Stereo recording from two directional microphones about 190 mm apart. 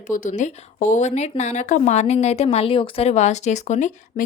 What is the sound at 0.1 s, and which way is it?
Speech, 40° left (ahead or behind).